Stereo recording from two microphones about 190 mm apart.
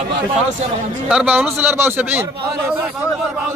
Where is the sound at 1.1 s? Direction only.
5° right (ahead or behind).